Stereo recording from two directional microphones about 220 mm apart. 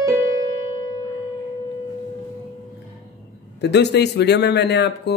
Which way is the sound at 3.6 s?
50° left (ahead or behind).